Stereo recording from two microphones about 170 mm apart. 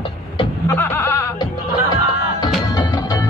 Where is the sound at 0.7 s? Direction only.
15° left (ahead or behind).